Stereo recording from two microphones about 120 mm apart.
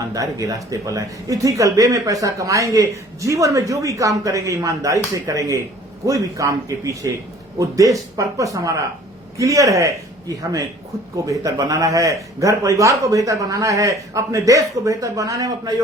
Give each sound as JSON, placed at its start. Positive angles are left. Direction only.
{"t": 0.1, "sound": "speech", "side_deg": -30}